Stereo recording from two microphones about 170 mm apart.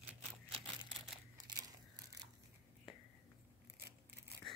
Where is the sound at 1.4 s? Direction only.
20° right (ahead or behind).